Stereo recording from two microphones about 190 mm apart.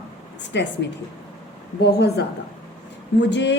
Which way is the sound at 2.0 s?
60° left (ahead or behind).